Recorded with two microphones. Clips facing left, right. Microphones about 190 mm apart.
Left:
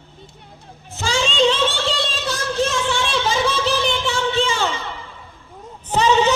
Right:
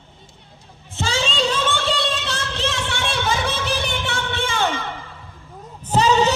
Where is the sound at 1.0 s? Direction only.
35° right (ahead or behind); by 4.8 s 55° right (ahead or behind).